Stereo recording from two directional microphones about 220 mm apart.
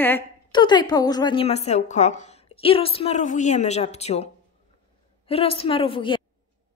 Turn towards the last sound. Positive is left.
turn(degrees=25)  # may be behind; listen again after turning